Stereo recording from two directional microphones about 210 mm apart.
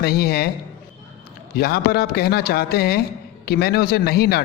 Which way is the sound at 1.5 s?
50° left (ahead or behind).